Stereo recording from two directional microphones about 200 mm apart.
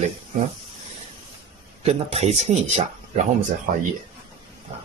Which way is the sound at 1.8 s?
30° right (ahead or behind).